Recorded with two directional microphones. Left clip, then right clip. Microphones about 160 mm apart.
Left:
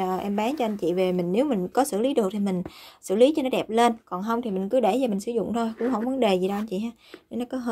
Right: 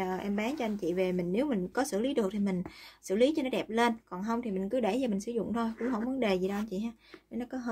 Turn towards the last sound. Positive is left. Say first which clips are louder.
# left 8 dB
turn(degrees=35)  # may be behind; listen again after turning